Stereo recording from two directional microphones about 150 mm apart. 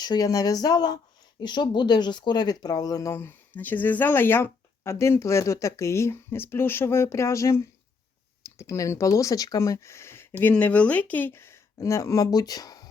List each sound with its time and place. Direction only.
0.0 s speech: 25° left (ahead or behind)